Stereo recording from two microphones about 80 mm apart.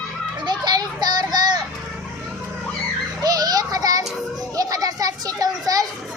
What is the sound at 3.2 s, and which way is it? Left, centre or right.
Children playing, right.